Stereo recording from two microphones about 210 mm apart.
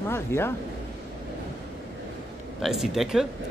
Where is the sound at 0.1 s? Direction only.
10° left (ahead or behind).